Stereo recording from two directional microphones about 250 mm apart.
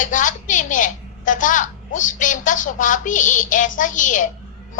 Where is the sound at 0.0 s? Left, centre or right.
Left.